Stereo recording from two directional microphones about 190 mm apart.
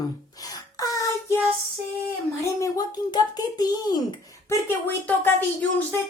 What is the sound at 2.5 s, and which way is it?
A child's voice, 20° left (ahead or behind).